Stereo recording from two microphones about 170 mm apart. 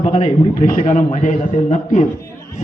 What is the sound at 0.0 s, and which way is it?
Speech, 35° left (ahead or behind).